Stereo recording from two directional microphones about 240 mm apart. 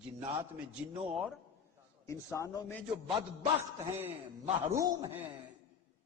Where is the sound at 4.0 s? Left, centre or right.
Centre.